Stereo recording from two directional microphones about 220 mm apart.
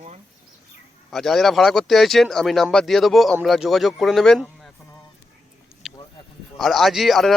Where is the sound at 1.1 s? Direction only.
Centre (ahead or behind).